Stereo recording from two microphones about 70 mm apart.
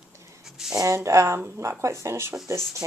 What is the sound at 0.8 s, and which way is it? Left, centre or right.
Speech, right.